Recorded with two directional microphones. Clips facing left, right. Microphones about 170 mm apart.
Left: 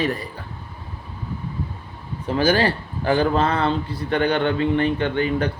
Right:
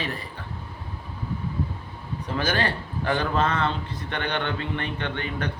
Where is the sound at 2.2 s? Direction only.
30° left (ahead or behind).